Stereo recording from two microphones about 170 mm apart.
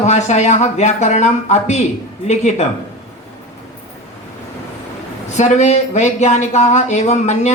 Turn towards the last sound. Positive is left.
turn(degrees=40)  # may be behind; listen again after turning